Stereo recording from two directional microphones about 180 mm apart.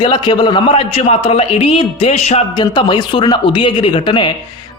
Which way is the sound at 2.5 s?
25° left (ahead or behind).